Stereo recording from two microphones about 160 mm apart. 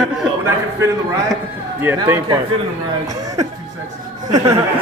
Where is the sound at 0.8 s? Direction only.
15° right (ahead or behind).